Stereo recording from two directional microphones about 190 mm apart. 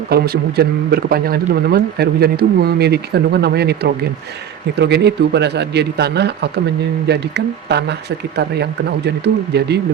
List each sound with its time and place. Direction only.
0.1 s a man's voice: 55° right (ahead or behind)